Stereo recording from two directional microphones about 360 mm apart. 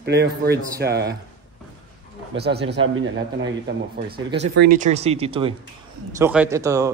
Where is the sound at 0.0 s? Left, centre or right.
Right.